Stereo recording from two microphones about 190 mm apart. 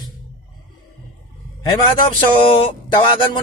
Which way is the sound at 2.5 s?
25° left (ahead or behind).